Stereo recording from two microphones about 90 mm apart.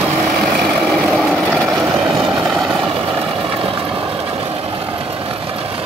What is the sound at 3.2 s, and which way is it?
Vehicle, 90° right.